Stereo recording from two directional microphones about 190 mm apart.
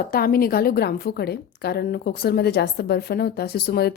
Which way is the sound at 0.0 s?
50° left (ahead or behind).